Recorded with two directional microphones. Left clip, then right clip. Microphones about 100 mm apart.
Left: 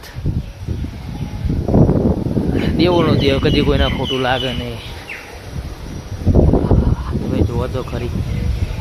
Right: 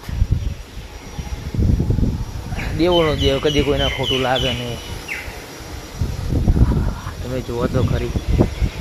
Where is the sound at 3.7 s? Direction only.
45° left (ahead or behind).